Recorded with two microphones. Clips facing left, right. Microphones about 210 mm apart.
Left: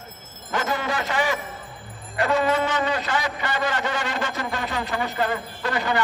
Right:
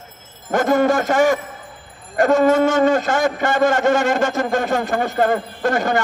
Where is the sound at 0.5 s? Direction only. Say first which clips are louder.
Right 10 dB; 50° right (ahead or behind).